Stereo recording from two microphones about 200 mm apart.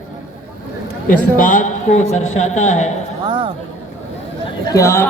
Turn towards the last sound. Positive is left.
turn(degrees=15)  # may be behind; listen again after turning